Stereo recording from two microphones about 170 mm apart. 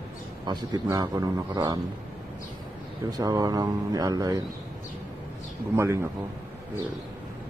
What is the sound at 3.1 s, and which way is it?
A man's voice, 20° right (ahead or behind).